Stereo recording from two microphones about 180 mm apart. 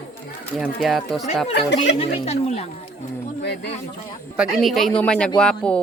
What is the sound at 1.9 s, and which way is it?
Speech, 35° left (ahead or behind).